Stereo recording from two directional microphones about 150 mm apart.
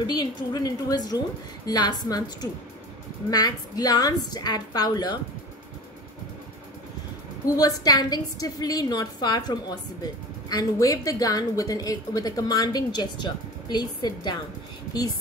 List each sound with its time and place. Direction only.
0.0 s a woman's voice: 30° left (ahead or behind)
7.4 s a woman's voice: 25° left (ahead or behind)